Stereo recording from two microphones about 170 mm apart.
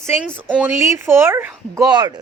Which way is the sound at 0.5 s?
10° right (ahead or behind).